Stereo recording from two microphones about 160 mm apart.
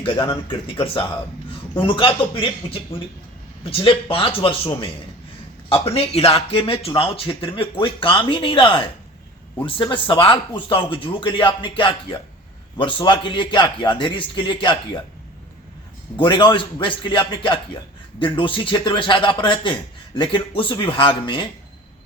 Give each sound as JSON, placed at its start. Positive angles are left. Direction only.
{"t": 0.0, "sound": "speech", "side_deg": 30}
{"t": 16.1, "sound": "speech", "side_deg": 30}